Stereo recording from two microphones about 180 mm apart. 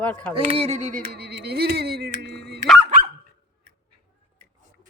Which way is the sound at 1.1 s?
65° right (ahead or behind).